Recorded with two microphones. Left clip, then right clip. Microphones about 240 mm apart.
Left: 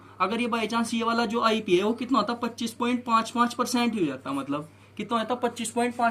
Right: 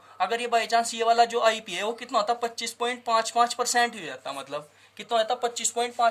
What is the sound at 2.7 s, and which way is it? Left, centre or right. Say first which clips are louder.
Speech: left 1 dB; right.